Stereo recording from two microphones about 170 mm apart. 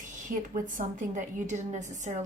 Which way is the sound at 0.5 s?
50° right (ahead or behind).